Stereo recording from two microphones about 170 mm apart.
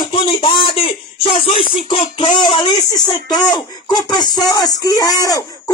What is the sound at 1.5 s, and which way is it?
Speech, 45° left (ahead or behind).